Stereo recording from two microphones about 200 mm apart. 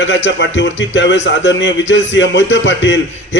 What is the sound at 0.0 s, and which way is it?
Speech, 65° left (ahead or behind).